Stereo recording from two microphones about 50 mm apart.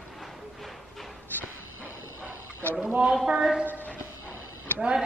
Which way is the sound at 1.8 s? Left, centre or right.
Right.